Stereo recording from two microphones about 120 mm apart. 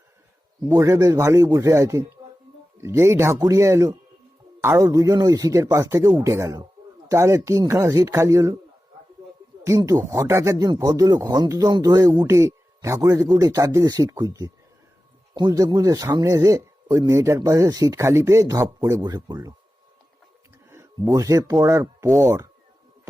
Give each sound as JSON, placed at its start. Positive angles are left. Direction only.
{"t": 0.7, "sound": "speech", "side_deg": -30}
{"t": 9.6, "sound": "speech", "side_deg": -25}
{"t": 20.7, "sound": "speech", "side_deg": -20}